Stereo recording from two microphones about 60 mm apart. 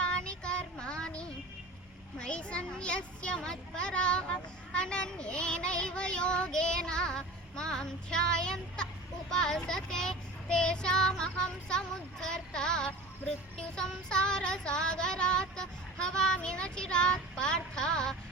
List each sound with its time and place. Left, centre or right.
0.0 s child singing: centre
2.1 s a child's voice: centre
9.3 s child singing: centre